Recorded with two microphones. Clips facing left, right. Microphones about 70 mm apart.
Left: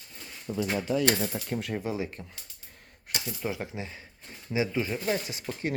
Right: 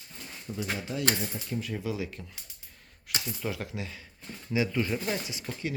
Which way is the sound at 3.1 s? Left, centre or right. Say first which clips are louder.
Even; left.